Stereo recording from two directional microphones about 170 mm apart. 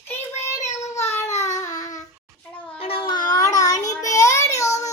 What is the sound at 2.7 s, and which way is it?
Child singing, 35° left (ahead or behind).